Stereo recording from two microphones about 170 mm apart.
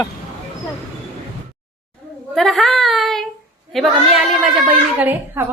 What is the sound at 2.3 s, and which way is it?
A woman's voice, centre (ahead or behind).